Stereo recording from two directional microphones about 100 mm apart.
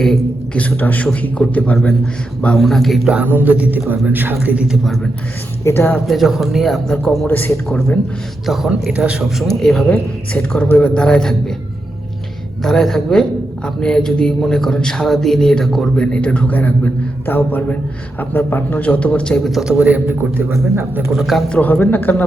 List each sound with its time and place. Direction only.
0.0 s a man's voice: 5° left (ahead or behind)
0.6 s speech: 15° left (ahead or behind)
2.6 s a man's voice: centre (ahead or behind)
3.1 s a man's voice: 15° right (ahead or behind)
5.6 s speech: 20° left (ahead or behind)
6.1 s a man's voice: centre (ahead or behind)
7.3 s speech: 20° left (ahead or behind)
8.4 s a man's voice: centre (ahead or behind)
9.5 s a man's voice: 5° left (ahead or behind)
12.6 s a man's voice: 5° left (ahead or behind)
19.5 s a man's voice: centre (ahead or behind)
20.5 s speech: 25° right (ahead or behind)
21.2 s a man's voice: centre (ahead or behind)
21.5 s speech: 15° left (ahead or behind)